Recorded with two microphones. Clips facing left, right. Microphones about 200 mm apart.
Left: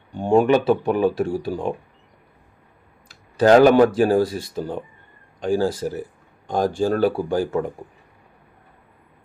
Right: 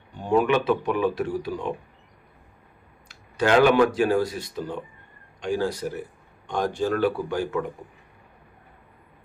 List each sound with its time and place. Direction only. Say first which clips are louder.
0.1 s speech: left 5 dB; 30° left (ahead or behind)
3.3 s speech: left 5 dB; 40° left (ahead or behind)